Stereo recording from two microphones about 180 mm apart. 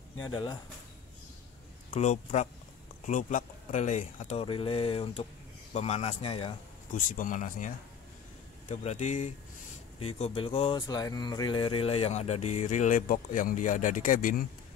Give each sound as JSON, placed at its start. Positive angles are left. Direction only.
{"t": 0.3, "sound": "speech", "side_deg": 25}
{"t": 2.0, "sound": "speech", "side_deg": 40}
{"t": 6.9, "sound": "speech", "side_deg": 50}